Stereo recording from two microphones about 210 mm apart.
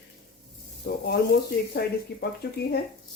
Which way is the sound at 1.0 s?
50° left (ahead or behind).